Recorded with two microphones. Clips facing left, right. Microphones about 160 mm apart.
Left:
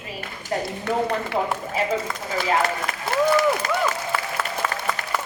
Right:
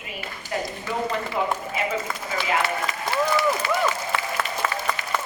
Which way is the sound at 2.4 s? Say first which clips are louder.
Left 2 dB; 45° left (ahead or behind).